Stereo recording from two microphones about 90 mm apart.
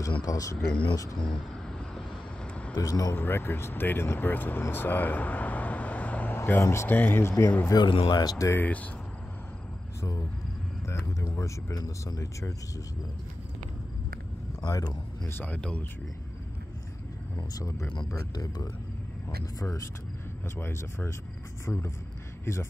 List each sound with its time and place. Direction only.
0.2 s speech: 40° left (ahead or behind)
0.7 s speech: 65° left (ahead or behind)
2.0 s vehicle: 15° left (ahead or behind)
2.7 s speech: 45° left (ahead or behind)
3.2 s speech: 25° left (ahead or behind)
7.7 s speech: 65° left (ahead or behind)
8.2 s speech: 45° left (ahead or behind)
8.5 s speech: 20° left (ahead or behind)
10.9 s speech: 35° left (ahead or behind)
14.6 s a man's voice: 50° left (ahead or behind)
15.2 s speech: 20° left (ahead or behind)
17.4 s speech: 40° left (ahead or behind)
20.5 s speech: 25° left (ahead or behind)